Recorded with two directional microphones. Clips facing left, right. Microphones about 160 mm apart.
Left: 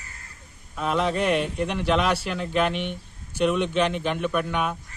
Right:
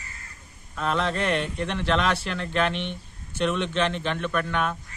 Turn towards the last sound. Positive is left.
turn(degrees=10)  # may be behind; listen again after turning